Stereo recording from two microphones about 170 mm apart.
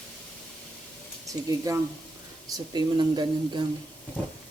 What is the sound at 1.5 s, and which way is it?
Speech, 20° right (ahead or behind).